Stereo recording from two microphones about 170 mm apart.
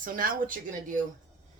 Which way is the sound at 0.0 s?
55° right (ahead or behind).